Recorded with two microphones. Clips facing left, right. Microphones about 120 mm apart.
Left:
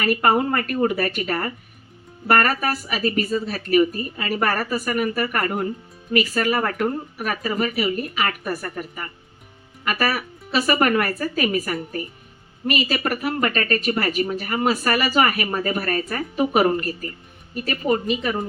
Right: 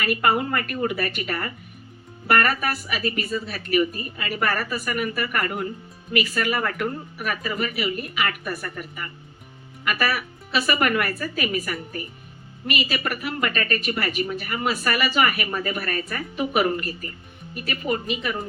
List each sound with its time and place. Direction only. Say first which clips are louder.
0.0 s a woman's voice: left 3 dB; 40° left (ahead or behind)